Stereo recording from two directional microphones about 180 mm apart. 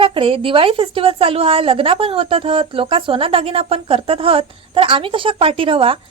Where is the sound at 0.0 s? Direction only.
30° right (ahead or behind).